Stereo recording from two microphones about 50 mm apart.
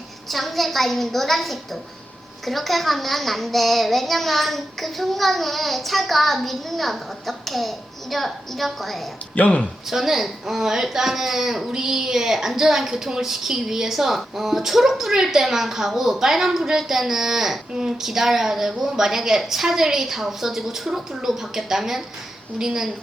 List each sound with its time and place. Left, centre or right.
0.3 s a child's voice: centre
9.3 s speech: left
9.9 s a child's voice: centre